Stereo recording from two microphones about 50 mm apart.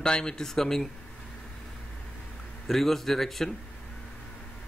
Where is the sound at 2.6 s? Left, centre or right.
Centre.